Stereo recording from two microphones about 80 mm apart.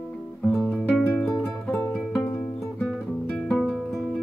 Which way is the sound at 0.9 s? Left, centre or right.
Centre.